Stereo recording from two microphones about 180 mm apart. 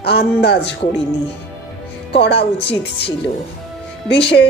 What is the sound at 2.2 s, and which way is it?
Speech, 70° left (ahead or behind).